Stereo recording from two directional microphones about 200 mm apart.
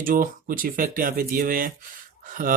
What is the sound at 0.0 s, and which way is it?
A man's voice, 45° right (ahead or behind).